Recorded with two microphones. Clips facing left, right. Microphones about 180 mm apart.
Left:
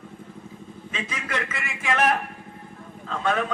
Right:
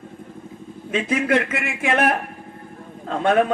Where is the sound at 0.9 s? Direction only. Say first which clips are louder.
Right 12 dB; 55° right (ahead or behind).